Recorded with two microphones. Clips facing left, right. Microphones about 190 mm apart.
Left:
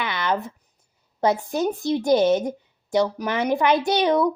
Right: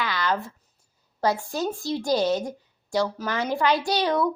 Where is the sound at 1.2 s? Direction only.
20° left (ahead or behind).